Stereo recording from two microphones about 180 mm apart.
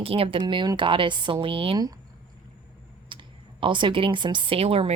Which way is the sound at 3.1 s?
25° right (ahead or behind).